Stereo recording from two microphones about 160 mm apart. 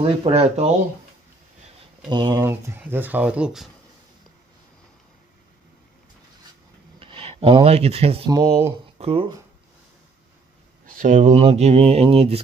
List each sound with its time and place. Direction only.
0.0 s speech: 35° right (ahead or behind)
2.0 s speech: 25° right (ahead or behind)
2.5 s speech: 15° right (ahead or behind)
7.0 s speech: 35° right (ahead or behind)
8.3 s speech: 25° right (ahead or behind)
8.9 s speech: 35° right (ahead or behind)
11.0 s speech: 50° right (ahead or behind)